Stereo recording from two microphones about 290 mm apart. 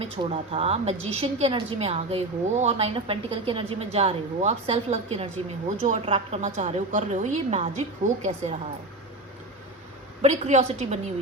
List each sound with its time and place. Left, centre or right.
0.0 s a woman's voice: right
10.2 s a woman's voice: right